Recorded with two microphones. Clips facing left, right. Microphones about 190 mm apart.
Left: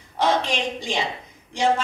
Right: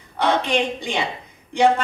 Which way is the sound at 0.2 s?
60° right (ahead or behind).